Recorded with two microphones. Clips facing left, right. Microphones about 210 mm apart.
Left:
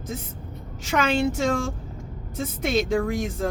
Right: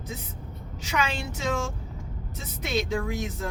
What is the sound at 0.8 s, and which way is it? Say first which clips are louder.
A woman's voice: left 8 dB; 50° left (ahead or behind).